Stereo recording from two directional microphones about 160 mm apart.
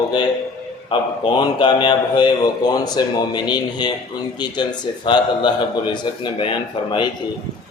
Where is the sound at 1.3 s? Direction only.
30° left (ahead or behind).